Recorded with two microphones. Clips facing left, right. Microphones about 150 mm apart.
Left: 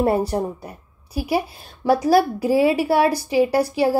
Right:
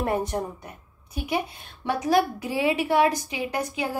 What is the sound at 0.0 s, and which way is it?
A woman's voice, 35° left (ahead or behind).